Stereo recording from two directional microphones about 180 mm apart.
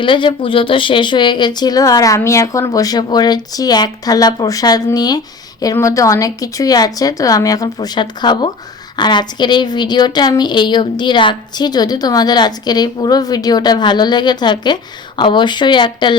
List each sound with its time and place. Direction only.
0.0 s speech: 25° left (ahead or behind)